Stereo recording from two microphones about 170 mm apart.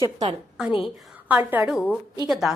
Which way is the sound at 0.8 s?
10° right (ahead or behind).